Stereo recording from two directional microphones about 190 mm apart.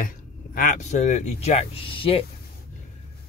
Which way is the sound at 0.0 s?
45° left (ahead or behind).